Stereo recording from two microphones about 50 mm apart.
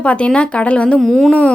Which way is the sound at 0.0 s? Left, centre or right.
Left.